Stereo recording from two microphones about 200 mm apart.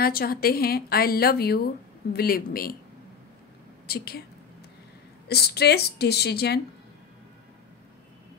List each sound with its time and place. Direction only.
0.0 s a woman's voice: 50° left (ahead or behind)
3.8 s speech: 50° left (ahead or behind)
5.3 s a woman's voice: 55° left (ahead or behind)